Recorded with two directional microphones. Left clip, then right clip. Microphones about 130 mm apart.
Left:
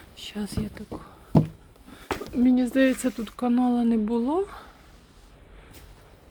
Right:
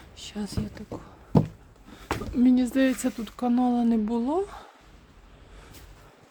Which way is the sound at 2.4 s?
35° right (ahead or behind).